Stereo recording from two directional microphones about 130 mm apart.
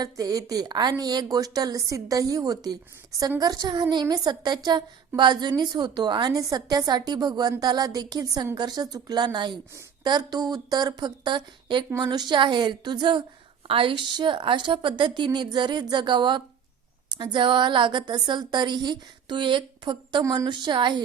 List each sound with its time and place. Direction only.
0.0 s a woman's voice: 30° right (ahead or behind)